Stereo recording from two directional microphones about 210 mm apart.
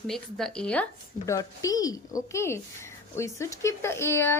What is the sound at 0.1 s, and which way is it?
Speech, centre (ahead or behind).